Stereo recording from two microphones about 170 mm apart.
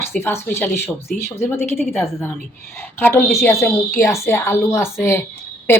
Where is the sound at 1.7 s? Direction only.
Centre (ahead or behind).